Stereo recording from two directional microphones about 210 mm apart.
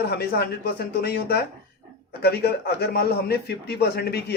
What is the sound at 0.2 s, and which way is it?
A man's voice, 50° left (ahead or behind).